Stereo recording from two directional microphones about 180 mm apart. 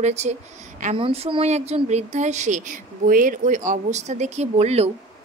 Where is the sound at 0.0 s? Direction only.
40° right (ahead or behind).